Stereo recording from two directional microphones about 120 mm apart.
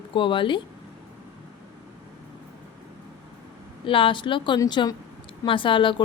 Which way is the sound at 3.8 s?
45° left (ahead or behind).